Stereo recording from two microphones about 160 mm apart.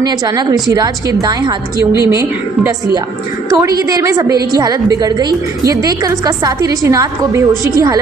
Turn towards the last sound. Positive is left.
turn(degrees=-20)  # may be behind; listen again after turning